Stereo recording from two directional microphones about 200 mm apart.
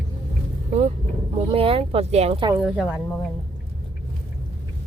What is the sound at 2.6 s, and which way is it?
Speech, 5° right (ahead or behind).